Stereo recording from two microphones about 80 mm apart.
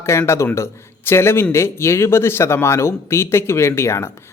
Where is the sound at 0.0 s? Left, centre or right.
Left.